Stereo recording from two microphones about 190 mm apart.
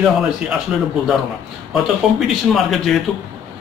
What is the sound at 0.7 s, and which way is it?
Speech, 5° right (ahead or behind).